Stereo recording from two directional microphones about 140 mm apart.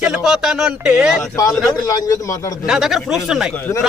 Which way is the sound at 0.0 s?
5° right (ahead or behind).